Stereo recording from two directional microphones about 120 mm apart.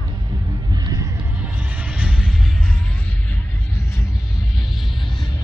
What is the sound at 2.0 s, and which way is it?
Music, 10° right (ahead or behind).